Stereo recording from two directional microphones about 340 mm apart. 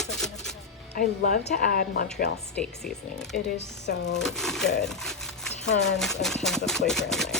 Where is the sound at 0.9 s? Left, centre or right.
Left.